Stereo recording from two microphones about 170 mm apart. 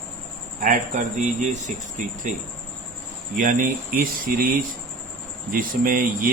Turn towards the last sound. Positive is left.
turn(degrees=-55)  # may be behind; listen again after turning